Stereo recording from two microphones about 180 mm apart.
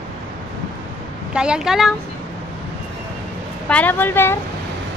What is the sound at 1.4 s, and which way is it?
Speech, 5° right (ahead or behind).